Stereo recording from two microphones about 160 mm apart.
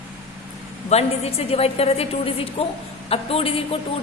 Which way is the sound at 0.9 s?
40° left (ahead or behind).